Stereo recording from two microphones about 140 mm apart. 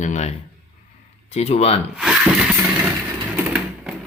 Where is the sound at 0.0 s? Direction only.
55° left (ahead or behind).